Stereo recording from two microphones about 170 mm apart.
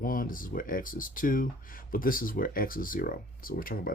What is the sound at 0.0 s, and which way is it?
Speech, 55° left (ahead or behind).